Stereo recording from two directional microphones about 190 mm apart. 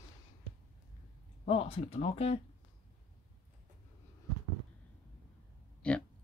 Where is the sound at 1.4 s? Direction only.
35° left (ahead or behind).